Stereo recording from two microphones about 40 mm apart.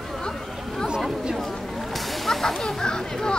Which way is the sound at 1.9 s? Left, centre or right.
Centre.